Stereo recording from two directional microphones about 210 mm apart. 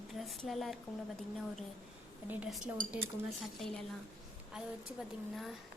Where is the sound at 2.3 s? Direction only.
5° right (ahead or behind).